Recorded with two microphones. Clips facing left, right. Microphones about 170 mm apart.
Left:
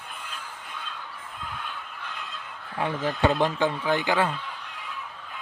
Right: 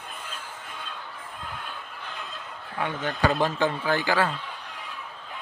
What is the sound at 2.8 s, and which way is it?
Speech, 30° left (ahead or behind).